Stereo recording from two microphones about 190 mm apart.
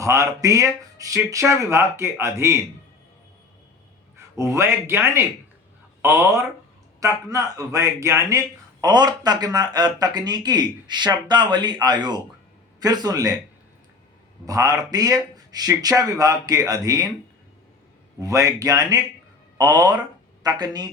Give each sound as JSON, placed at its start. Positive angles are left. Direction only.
{"t": 0.0, "sound": "speech", "side_deg": -15}
{"t": 4.4, "sound": "speech", "side_deg": -15}
{"t": 14.4, "sound": "speech", "side_deg": -20}
{"t": 18.2, "sound": "speech", "side_deg": -15}